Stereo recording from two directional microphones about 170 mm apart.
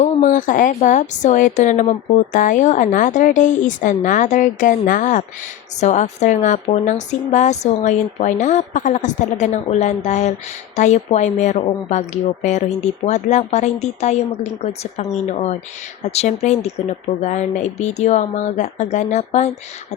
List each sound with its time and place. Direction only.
0.0 s a woman's voice: 50° left (ahead or behind)